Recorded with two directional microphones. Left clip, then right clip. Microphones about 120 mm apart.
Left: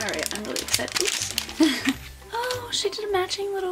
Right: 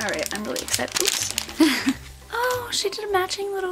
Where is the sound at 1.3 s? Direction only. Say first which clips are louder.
Right 2 dB; 30° right (ahead or behind).